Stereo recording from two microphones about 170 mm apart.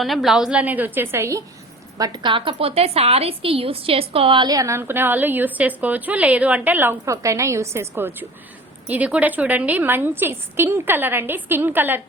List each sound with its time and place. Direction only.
0.0 s a woman's voice: centre (ahead or behind)